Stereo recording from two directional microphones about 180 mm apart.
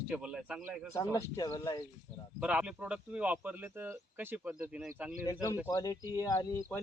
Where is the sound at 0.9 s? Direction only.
15° left (ahead or behind).